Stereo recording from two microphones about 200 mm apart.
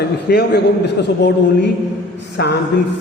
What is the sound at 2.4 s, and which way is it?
Speech, 55° left (ahead or behind).